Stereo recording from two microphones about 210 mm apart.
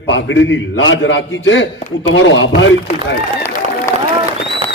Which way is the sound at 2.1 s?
65° left (ahead or behind).